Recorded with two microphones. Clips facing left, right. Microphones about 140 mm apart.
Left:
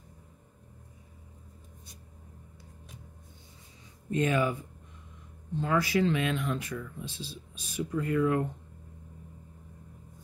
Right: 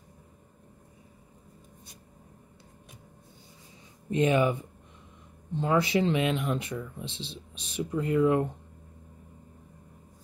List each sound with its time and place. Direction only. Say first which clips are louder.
4.1 s speech: right 3 dB; 20° right (ahead or behind)